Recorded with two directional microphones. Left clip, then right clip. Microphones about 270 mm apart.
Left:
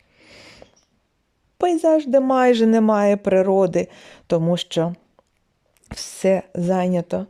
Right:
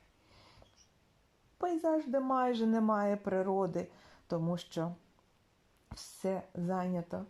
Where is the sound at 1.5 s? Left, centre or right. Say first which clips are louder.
Left 15 dB; left.